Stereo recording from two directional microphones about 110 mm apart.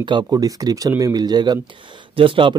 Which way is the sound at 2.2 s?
50° right (ahead or behind).